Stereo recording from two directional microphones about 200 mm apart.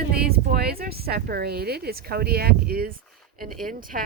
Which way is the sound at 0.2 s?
50° right (ahead or behind).